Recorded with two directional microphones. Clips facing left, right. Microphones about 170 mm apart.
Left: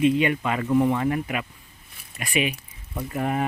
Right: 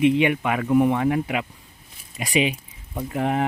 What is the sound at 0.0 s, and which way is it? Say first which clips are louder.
Speech: right 2 dB; 15° right (ahead or behind).